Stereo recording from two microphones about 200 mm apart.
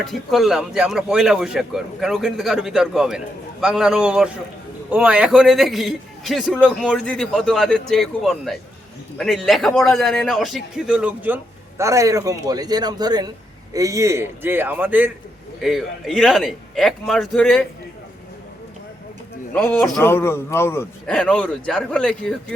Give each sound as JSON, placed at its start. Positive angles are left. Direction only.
{"t": 0.0, "sound": "a man's voice", "side_deg": 0}
{"t": 19.5, "sound": "a man's voice", "side_deg": 5}